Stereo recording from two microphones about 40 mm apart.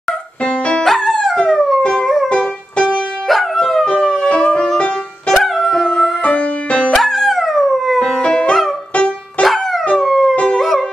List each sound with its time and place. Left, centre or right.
0.4 s music: left
1.0 s dog: centre
1.5 s howl: centre
1.8 s music: left
3.3 s music: centre; by 4.8 s left
5.3 s music: centre
6.2 s music: left
6.9 s music: centre
8.2 s music: left
9.9 s howl: centre
10.3 s howl: left
10.6 s music: centre